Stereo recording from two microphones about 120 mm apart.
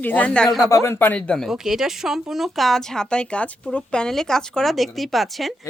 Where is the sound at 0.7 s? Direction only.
25° left (ahead or behind); by 1.5 s 5° left (ahead or behind).